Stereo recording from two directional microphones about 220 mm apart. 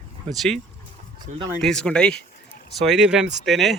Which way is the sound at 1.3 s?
35° right (ahead or behind).